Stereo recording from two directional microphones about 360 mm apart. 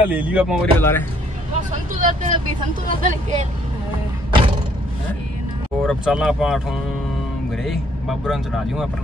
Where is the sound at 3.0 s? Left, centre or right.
Right.